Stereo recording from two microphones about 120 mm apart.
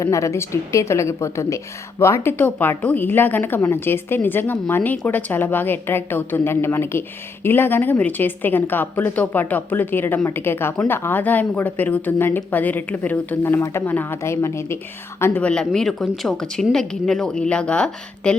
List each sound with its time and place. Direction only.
0.0 s a woman's voice: 25° left (ahead or behind); by 18.3 s 5° left (ahead or behind)